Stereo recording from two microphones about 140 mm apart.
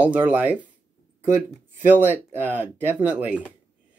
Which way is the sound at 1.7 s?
15° right (ahead or behind).